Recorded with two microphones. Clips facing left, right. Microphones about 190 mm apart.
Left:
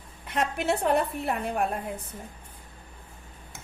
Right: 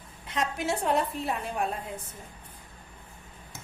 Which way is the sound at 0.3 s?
60° left (ahead or behind).